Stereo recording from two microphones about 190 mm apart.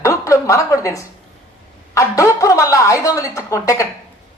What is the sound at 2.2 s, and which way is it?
A woman's voice, 15° left (ahead or behind).